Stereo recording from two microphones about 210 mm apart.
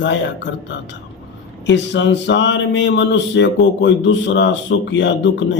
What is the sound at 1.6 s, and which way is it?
Speech, 55° left (ahead or behind).